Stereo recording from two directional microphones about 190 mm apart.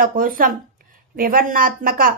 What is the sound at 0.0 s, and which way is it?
A woman's voice, 50° right (ahead or behind).